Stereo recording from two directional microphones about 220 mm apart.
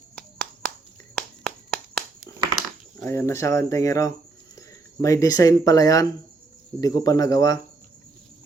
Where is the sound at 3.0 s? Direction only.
10° left (ahead or behind).